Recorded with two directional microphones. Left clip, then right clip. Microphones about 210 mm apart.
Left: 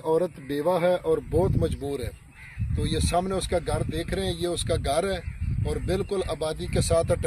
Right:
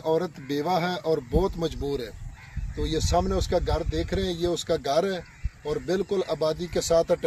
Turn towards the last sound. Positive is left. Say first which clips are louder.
# right 2 dB
turn(degrees=-30)  # may be behind; listen again after turning